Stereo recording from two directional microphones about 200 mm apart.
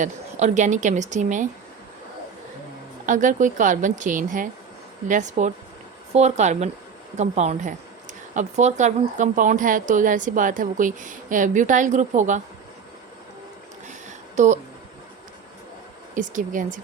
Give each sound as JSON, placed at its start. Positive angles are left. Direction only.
{"t": 0.0, "sound": "speech", "side_deg": -35}
{"t": 3.1, "sound": "speech", "side_deg": -40}
{"t": 14.3, "sound": "speech", "side_deg": -35}
{"t": 16.1, "sound": "speech", "side_deg": -40}